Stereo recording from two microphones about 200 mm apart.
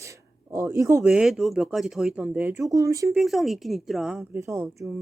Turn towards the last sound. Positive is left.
turn(degrees=-10)  # may be behind; listen again after turning